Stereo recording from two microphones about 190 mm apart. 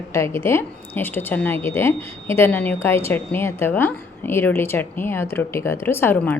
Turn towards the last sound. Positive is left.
turn(degrees=10)  # may be behind; listen again after turning